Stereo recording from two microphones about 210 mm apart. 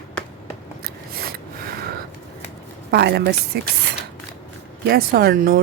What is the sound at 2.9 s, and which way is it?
Speech, 50° right (ahead or behind).